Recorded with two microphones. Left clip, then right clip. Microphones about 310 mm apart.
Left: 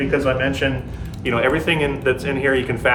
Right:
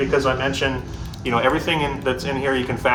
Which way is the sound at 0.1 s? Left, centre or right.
Right.